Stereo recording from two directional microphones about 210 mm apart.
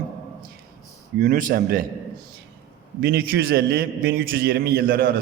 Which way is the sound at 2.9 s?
45° right (ahead or behind).